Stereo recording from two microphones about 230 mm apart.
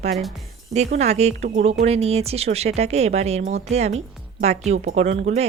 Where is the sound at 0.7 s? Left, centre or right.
Right.